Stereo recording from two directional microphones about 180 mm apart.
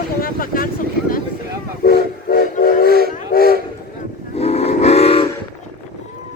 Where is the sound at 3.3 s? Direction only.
55° left (ahead or behind).